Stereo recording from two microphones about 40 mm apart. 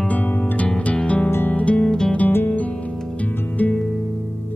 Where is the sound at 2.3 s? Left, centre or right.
Left.